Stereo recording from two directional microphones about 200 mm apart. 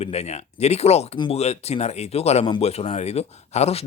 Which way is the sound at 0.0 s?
30° left (ahead or behind).